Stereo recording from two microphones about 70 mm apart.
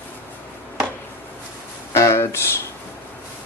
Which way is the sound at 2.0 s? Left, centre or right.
Left.